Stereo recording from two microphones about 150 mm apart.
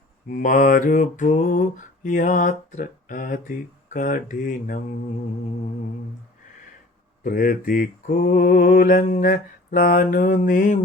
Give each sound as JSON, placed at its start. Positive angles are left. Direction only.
{"t": 0.3, "sound": "mantra", "side_deg": 60}
{"t": 7.3, "sound": "mantra", "side_deg": 65}